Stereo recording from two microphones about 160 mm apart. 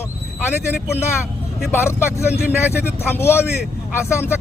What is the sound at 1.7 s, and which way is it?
Speech, 15° left (ahead or behind).